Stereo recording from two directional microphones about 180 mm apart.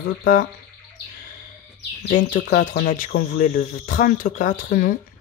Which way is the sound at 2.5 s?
45° left (ahead or behind).